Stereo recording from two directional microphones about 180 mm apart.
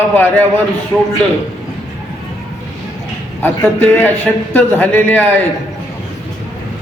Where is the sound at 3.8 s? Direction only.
10° left (ahead or behind).